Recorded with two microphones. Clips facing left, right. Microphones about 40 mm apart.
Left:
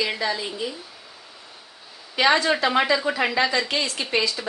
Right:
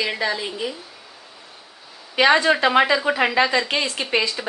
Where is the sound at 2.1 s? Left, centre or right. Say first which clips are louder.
Right 3 dB; right.